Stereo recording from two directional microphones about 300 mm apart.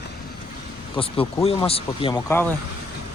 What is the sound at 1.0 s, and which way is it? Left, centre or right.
Speech, centre.